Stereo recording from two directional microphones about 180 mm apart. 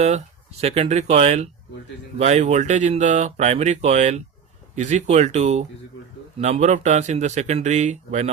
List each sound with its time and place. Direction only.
0.0 s speech: 35° right (ahead or behind)